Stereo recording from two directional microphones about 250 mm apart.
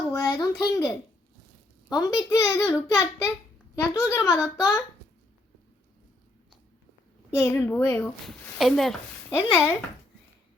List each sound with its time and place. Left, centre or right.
0.1 s a sound: centre
0.6 s speech: centre
1.9 s speech: centre
7.4 s speech: centre